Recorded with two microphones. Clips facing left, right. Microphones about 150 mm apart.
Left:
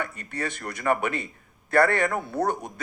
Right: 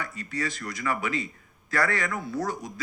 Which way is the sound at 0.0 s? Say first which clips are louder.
Left 1 dB; 60° left (ahead or behind).